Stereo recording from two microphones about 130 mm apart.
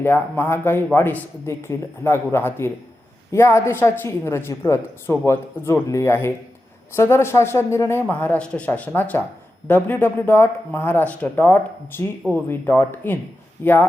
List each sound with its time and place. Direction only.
0.0 s a woman's voice: 15° left (ahead or behind)